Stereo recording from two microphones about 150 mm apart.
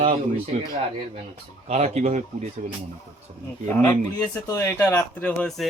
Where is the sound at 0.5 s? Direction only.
45° right (ahead or behind).